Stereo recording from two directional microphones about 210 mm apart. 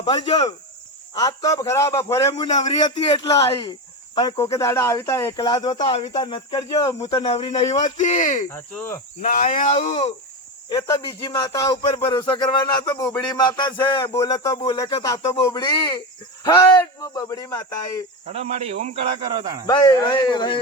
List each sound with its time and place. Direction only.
0.3 s a man's voice: 20° left (ahead or behind); by 8.4 s 35° left (ahead or behind)
8.4 s a man's voice: 10° left (ahead or behind)
9.2 s speech: 40° left (ahead or behind)
10.7 s a man's voice: 15° left (ahead or behind)
18.3 s speech: 30° right (ahead or behind)
19.6 s speech: 20° left (ahead or behind)